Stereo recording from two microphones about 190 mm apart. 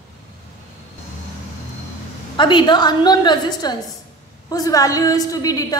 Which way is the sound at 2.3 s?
25° left (ahead or behind).